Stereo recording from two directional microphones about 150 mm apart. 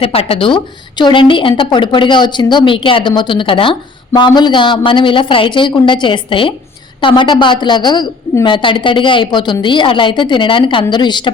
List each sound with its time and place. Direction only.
0.0 s a woman's voice: 40° left (ahead or behind)